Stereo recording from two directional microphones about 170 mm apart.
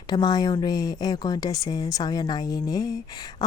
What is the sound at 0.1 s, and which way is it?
Speech, 25° left (ahead or behind).